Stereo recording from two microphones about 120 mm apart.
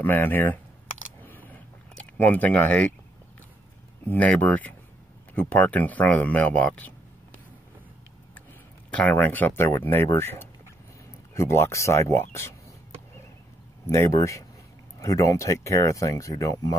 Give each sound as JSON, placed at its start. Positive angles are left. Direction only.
{"t": 0.0, "sound": "speech", "side_deg": 15}
{"t": 1.2, "sound": "a sound", "side_deg": 15}
{"t": 2.1, "sound": "speech", "side_deg": 15}
{"t": 4.0, "sound": "speech", "side_deg": 10}
{"t": 8.9, "sound": "speech", "side_deg": 15}
{"t": 13.8, "sound": "speech", "side_deg": 25}